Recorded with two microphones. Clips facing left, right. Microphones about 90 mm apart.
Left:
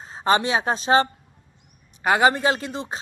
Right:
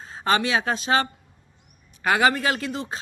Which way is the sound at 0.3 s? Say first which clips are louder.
Left 2 dB; 25° left (ahead or behind).